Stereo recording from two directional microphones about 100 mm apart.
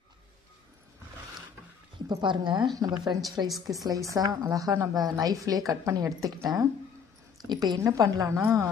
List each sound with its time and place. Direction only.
2.0 s a woman's voice: 50° right (ahead or behind)
7.8 s a woman's voice: 30° right (ahead or behind)